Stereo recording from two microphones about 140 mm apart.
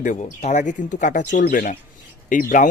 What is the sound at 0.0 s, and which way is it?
Speech, 60° left (ahead or behind).